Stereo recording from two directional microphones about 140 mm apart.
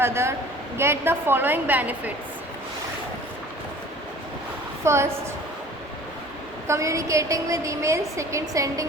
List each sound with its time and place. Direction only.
0.0 s a woman's voice: 20° right (ahead or behind)
4.8 s a woman's voice: 20° right (ahead or behind)
6.7 s a woman's voice: 20° right (ahead or behind)